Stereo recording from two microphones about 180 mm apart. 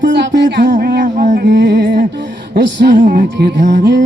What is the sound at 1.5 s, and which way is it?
Music, 70° right (ahead or behind).